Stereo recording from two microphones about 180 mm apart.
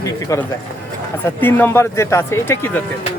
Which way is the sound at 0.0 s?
15° left (ahead or behind).